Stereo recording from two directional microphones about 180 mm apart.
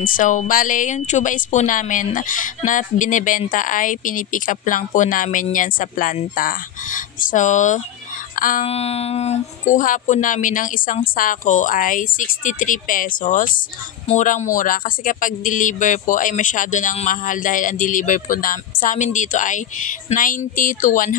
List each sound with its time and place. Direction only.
0.0 s speech: 50° left (ahead or behind)
8.6 s speech: 35° left (ahead or behind)